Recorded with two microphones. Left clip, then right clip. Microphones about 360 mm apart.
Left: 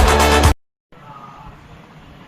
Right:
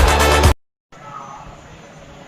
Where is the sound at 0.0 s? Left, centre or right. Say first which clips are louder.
Left 1 dB; centre.